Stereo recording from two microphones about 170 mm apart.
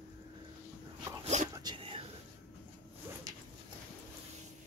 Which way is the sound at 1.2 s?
40° right (ahead or behind).